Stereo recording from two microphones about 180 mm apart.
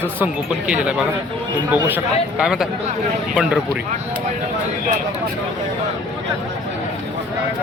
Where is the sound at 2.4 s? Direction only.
5° right (ahead or behind).